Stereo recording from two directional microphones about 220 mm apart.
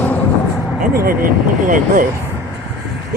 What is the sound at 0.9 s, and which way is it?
Speech, 40° right (ahead or behind).